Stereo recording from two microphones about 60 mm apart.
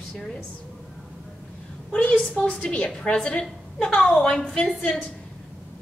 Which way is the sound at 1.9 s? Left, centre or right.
Centre.